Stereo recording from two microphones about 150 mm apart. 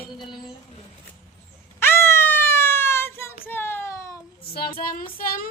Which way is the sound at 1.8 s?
15° left (ahead or behind).